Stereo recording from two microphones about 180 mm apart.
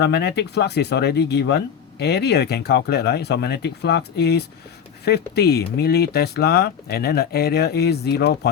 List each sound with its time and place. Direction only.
0.0 s speech: 65° left (ahead or behind)